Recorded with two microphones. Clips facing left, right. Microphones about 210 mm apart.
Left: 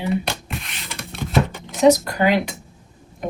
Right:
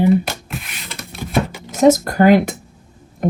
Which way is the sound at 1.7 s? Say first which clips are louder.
Right 2 dB; 45° right (ahead or behind).